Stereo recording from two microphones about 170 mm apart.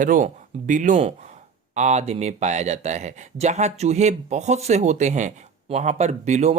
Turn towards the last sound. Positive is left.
turn(degrees=-40)  # may be behind; listen again after turning